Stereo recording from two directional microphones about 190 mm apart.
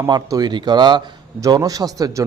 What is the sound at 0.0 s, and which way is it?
A man's voice, 20° right (ahead or behind).